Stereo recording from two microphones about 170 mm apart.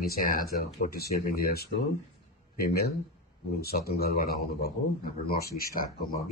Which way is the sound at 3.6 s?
65° left (ahead or behind).